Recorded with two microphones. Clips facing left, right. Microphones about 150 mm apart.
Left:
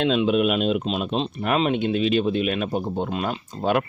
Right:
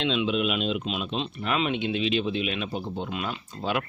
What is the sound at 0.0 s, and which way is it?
Speech, 45° left (ahead or behind).